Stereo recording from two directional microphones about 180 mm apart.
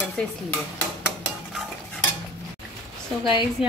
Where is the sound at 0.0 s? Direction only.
5° left (ahead or behind).